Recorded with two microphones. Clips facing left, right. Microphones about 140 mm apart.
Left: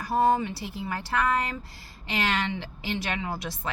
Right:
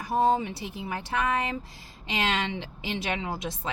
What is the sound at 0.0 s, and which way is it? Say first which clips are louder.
A woman's voice: left 1 dB; 20° right (ahead or behind).